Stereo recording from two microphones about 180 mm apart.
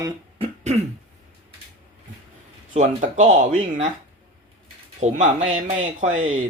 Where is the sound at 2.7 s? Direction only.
45° right (ahead or behind).